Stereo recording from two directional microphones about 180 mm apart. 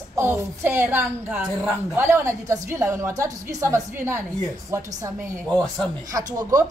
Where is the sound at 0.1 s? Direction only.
15° right (ahead or behind).